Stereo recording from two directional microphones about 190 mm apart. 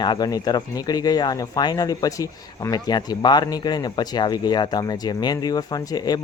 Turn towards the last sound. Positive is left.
turn(degrees=20)  # may be behind; listen again after turning